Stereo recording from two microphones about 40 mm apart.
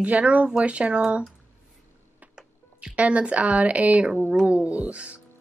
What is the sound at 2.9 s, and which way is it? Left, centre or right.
Speech, right.